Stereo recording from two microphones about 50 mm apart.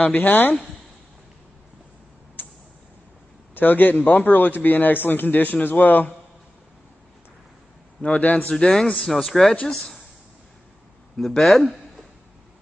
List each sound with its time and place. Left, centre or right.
0.1 s a man's voice: left
2.4 s a sound: left
3.5 s a man's voice: left
8.2 s a man's voice: left
8.5 s speech: centre
11.1 s speech: centre